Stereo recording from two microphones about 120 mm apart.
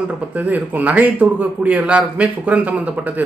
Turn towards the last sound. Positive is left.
turn(degrees=-10)  # may be behind; listen again after turning